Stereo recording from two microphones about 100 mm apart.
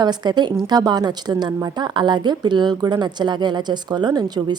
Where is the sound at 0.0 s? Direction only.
45° right (ahead or behind).